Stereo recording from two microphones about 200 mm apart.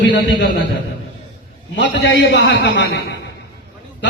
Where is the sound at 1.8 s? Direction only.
60° left (ahead or behind).